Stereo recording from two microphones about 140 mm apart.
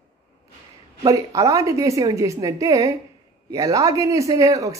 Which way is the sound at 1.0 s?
25° right (ahead or behind).